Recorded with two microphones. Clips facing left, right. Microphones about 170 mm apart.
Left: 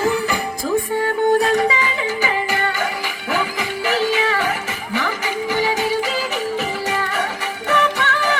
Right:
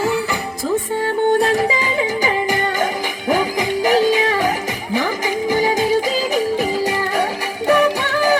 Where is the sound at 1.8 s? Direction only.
15° right (ahead or behind).